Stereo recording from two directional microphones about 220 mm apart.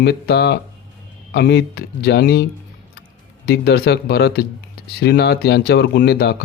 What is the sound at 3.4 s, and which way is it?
Speech, 50° left (ahead or behind).